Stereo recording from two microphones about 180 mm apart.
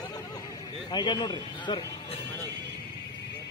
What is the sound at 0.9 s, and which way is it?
Speech, 25° left (ahead or behind).